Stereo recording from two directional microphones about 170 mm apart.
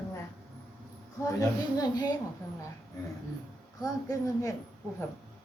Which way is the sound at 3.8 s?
20° left (ahead or behind).